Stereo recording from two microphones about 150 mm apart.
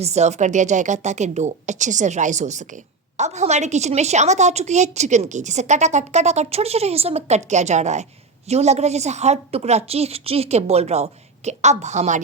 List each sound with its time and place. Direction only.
0.0 s a woman's voice: 50° right (ahead or behind)